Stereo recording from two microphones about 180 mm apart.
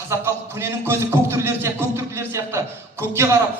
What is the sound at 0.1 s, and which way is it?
A man's voice, 15° right (ahead or behind).